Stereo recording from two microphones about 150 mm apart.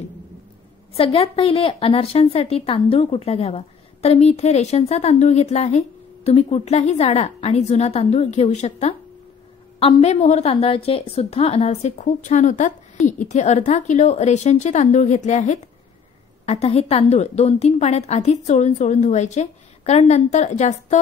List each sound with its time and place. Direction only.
0.9 s a woman's voice: 40° left (ahead or behind)